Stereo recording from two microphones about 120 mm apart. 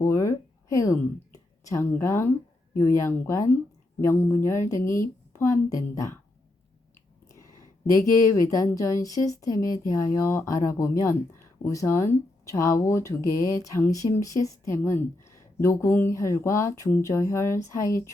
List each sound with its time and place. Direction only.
0.0 s a sound: 25° left (ahead or behind)
2.7 s speech: 25° left (ahead or behind)
7.9 s speech: 25° left (ahead or behind)